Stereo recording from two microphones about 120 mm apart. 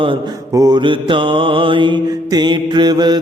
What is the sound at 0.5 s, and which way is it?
Mantra, 35° right (ahead or behind).